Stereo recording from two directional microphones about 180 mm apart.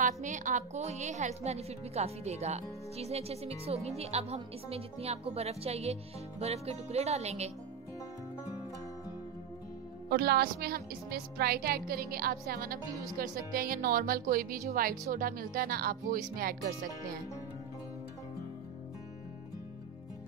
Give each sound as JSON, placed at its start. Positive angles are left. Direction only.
{"t": 0.0, "sound": "a woman's voice", "side_deg": -45}
{"t": 10.0, "sound": "a woman's voice", "side_deg": -65}